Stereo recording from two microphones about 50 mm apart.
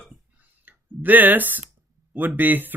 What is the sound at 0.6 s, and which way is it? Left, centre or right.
Speech, right.